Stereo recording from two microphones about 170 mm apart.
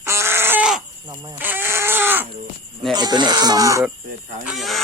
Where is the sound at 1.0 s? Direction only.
25° right (ahead or behind).